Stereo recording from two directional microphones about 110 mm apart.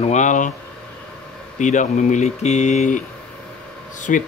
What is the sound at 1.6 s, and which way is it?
Speech, 90° left.